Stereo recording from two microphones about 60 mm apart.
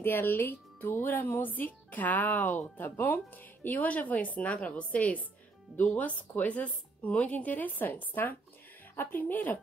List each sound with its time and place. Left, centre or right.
0.0 s speech: left